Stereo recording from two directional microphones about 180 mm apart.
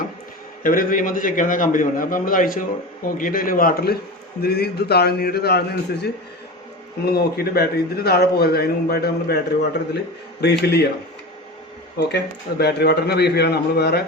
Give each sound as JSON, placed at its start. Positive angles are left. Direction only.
{"t": 0.6, "sound": "a man's voice", "side_deg": 50}
{"t": 10.4, "sound": "a man's voice", "side_deg": 65}
{"t": 11.9, "sound": "a man's voice", "side_deg": 65}